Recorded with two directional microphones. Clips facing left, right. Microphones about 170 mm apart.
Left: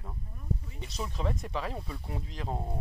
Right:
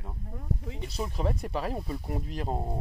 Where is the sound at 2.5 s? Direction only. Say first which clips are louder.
Right 2 dB; 20° right (ahead or behind).